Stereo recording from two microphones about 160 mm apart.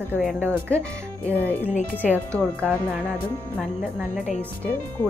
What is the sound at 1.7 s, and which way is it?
Speech, 50° left (ahead or behind).